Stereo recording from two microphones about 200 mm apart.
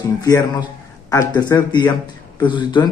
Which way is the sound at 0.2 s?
15° left (ahead or behind).